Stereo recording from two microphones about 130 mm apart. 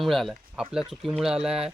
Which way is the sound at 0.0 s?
Centre (ahead or behind).